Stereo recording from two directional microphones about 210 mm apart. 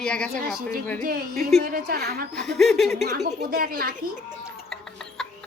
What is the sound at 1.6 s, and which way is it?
Speech, 50° right (ahead or behind).